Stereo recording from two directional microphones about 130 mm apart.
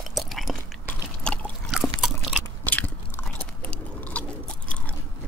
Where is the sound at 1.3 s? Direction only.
5° left (ahead or behind).